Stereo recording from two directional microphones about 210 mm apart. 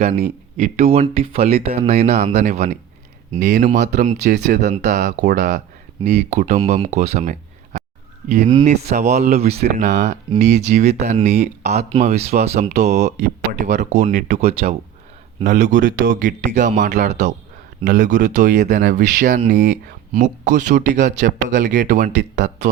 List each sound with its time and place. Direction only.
0.0 s speech: 30° right (ahead or behind)
9.0 s speech: 35° right (ahead or behind)
13.1 s speech: 50° right (ahead or behind)
13.6 s speech: 35° right (ahead or behind)